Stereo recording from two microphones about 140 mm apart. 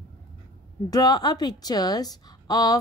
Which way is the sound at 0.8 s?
25° left (ahead or behind).